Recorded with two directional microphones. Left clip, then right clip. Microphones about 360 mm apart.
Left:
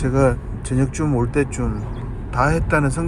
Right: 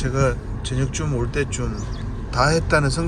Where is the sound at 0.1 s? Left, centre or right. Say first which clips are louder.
Left 4 dB; centre.